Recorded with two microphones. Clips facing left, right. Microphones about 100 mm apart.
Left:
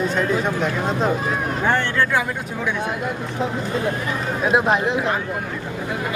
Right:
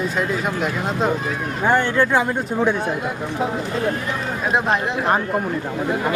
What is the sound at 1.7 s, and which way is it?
Speech, 15° right (ahead or behind).